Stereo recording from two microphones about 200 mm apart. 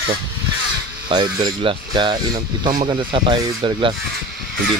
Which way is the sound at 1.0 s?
20° right (ahead or behind).